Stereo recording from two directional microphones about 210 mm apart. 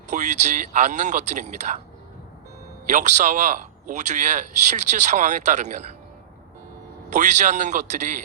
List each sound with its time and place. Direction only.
0.1 s a man's voice: 35° right (ahead or behind)
2.9 s a man's voice: 35° right (ahead or behind)
7.1 s a man's voice: 35° right (ahead or behind)